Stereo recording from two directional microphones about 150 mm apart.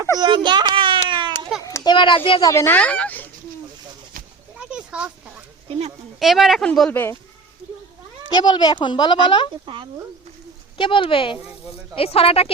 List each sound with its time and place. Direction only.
0.2 s a sound: 30° right (ahead or behind)
1.6 s speech: 25° left (ahead or behind)
2.5 s speech: 15° left (ahead or behind)
4.7 s a sound: 5° right (ahead or behind)
6.1 s a woman's voice: centre (ahead or behind)
8.3 s speech: 30° left (ahead or behind)
9.6 s speech: 30° right (ahead or behind)
10.8 s speech: 35° left (ahead or behind)